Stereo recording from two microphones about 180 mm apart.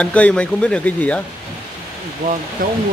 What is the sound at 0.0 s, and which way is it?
Speech, 5° left (ahead or behind).